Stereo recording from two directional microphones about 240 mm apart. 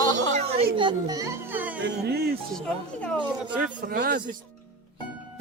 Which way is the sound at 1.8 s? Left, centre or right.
Right.